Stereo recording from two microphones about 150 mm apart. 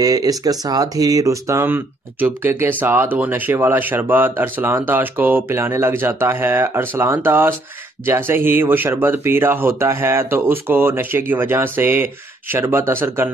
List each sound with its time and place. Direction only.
0.0 s speech: 25° right (ahead or behind)